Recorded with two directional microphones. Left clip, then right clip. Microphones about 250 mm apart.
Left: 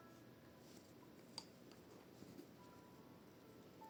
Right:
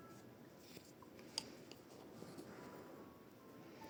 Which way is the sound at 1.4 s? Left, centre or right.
Right.